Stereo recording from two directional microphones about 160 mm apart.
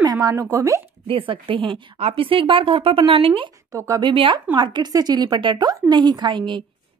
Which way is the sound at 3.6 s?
20° right (ahead or behind).